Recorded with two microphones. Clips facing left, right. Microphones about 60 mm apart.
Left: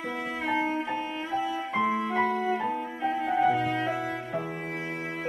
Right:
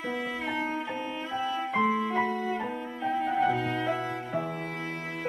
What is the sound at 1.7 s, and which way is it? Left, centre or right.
Music, centre.